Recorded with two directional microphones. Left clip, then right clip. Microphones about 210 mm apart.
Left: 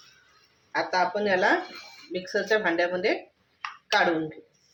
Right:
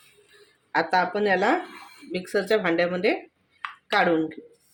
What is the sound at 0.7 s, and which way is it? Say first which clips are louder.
Speech: right 3 dB; 50° right (ahead or behind).